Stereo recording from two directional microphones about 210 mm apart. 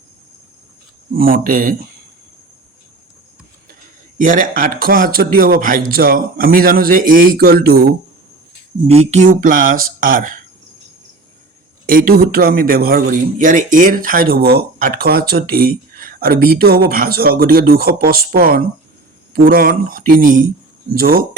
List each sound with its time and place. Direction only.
1.1 s speech: 45° right (ahead or behind)
4.2 s speech: 40° right (ahead or behind)
8.9 s speech: 30° right (ahead or behind)
11.9 s speech: 45° right (ahead or behind)